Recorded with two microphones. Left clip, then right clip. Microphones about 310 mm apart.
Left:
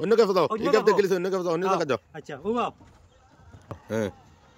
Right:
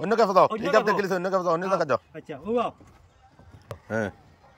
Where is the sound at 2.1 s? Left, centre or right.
Centre.